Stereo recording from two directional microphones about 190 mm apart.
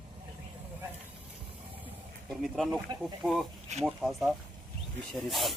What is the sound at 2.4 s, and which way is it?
Speech, centre (ahead or behind).